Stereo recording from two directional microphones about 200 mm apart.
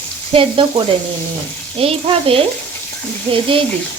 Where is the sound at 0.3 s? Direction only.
25° right (ahead or behind).